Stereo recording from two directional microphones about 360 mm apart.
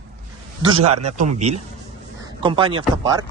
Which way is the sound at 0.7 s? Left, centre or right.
Right.